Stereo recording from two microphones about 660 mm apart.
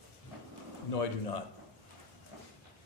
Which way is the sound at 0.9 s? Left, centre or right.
Left.